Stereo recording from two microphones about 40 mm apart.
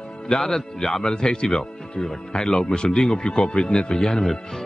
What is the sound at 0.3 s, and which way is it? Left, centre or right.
A man's voice, centre.